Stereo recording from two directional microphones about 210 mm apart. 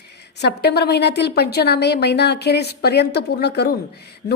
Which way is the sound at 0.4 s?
50° left (ahead or behind).